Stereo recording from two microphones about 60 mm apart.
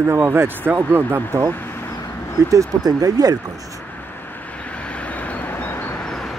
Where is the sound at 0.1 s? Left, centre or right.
Right.